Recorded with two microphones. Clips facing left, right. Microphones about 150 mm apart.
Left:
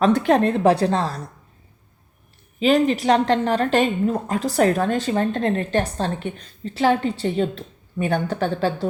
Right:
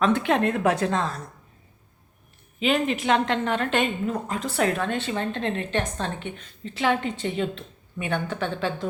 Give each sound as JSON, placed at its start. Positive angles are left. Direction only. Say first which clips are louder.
{"t": 0.0, "sound": "a woman's voice", "louder": "left 5 dB", "side_deg": 40}
{"t": 2.6, "sound": "a woman's voice", "louder": "left 6 dB", "side_deg": 35}